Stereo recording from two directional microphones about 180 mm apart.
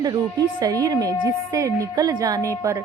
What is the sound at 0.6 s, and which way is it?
A woman's voice, 20° right (ahead or behind).